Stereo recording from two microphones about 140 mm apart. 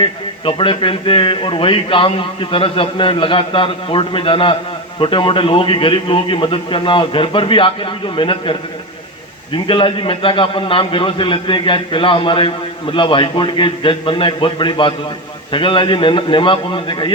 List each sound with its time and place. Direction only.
0.0 s a man's voice: 40° left (ahead or behind)